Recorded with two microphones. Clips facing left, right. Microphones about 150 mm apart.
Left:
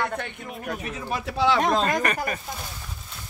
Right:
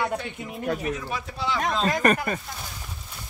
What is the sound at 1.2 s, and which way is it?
Speech, 85° left.